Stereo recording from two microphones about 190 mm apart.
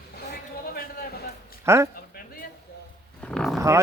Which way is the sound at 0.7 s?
50° left (ahead or behind).